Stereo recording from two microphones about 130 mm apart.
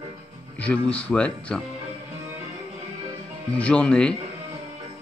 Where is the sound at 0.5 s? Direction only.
10° left (ahead or behind).